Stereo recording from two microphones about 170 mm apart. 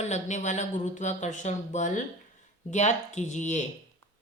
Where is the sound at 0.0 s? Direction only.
45° left (ahead or behind).